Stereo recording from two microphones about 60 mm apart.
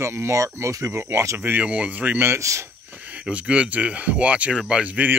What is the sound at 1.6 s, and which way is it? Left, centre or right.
Speech, right.